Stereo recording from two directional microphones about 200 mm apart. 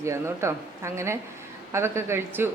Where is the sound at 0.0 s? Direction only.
15° right (ahead or behind).